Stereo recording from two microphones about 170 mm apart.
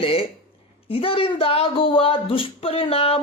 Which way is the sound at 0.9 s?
35° left (ahead or behind).